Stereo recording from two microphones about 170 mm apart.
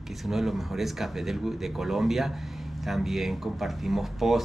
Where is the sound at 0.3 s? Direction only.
Centre (ahead or behind).